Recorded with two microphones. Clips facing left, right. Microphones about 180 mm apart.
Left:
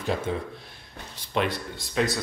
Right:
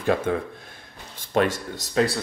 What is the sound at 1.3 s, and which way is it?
Speech, 45° right (ahead or behind).